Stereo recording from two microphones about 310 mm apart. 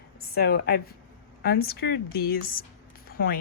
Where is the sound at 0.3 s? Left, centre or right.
Left.